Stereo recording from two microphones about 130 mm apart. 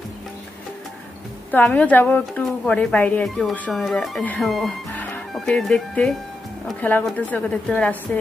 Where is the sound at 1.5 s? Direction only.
10° left (ahead or behind).